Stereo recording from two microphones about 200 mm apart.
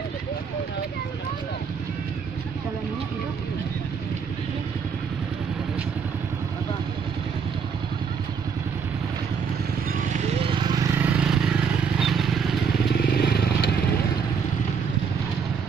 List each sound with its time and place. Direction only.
10.1 s vehicle: 25° right (ahead or behind); by 12.4 s centre (ahead or behind)
12.9 s vehicle: 55° left (ahead or behind)